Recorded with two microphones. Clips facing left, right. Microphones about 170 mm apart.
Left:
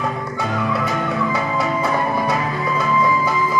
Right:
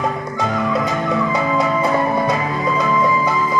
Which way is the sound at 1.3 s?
20° right (ahead or behind).